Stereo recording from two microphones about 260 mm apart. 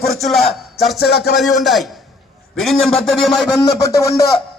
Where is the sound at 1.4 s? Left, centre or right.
Centre.